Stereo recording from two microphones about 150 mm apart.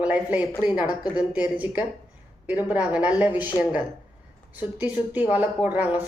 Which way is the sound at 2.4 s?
10° right (ahead or behind).